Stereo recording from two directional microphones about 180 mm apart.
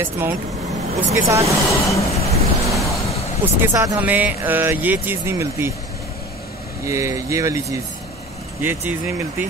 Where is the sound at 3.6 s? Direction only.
15° right (ahead or behind).